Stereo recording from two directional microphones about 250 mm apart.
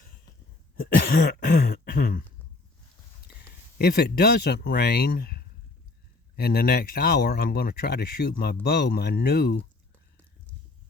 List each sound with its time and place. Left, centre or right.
0.8 s throat clearing: left
3.8 s speech: left